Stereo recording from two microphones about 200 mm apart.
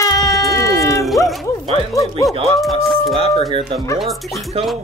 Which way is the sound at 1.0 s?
Centre (ahead or behind).